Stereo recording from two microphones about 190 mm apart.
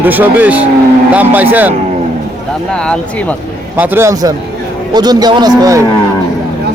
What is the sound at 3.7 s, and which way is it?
A man's voice, 10° right (ahead or behind).